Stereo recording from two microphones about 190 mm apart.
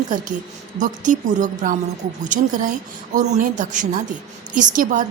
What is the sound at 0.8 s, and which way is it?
A woman's voice, 40° right (ahead or behind).